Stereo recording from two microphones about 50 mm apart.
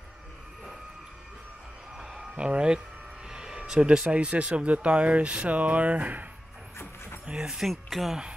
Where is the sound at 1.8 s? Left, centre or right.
Centre.